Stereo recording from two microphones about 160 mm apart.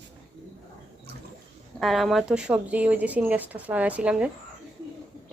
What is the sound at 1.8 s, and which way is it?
Speech, centre (ahead or behind).